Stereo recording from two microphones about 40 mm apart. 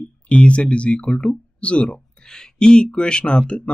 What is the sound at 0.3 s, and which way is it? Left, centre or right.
Speech, left.